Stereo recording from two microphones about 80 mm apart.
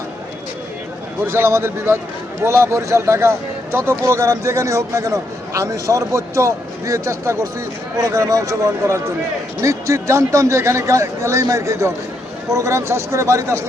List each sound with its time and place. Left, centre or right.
1.2 s speech: right